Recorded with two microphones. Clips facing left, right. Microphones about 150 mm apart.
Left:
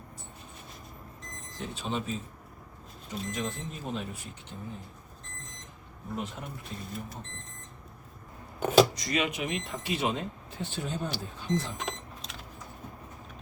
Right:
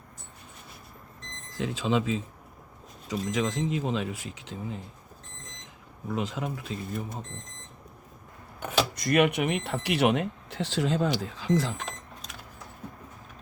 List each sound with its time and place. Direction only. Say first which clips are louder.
1.5 s speech: right 7 dB; 90° right
6.1 s speech: right 6 dB; 90° right
8.6 s speech: left 7 dB; 40° left (ahead or behind)
9.0 s speech: right 7 dB; 60° right (ahead or behind); by 11.8 s 90° right